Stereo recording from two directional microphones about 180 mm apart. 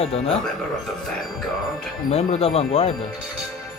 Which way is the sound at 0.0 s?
35° left (ahead or behind).